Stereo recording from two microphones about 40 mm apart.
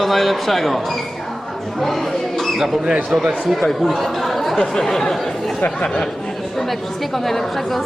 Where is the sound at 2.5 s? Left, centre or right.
Centre.